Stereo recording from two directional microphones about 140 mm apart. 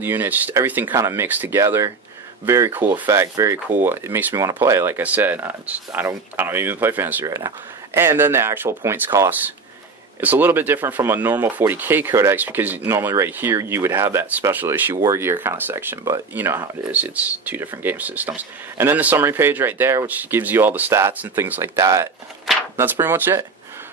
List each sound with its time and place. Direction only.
0.0 s speech: 15° right (ahead or behind)
7.2 s speech: 25° right (ahead or behind)